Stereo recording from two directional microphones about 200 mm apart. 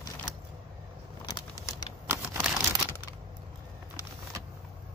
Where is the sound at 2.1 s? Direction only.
5° right (ahead or behind).